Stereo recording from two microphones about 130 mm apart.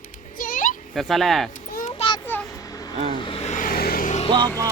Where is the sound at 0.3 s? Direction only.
90° left.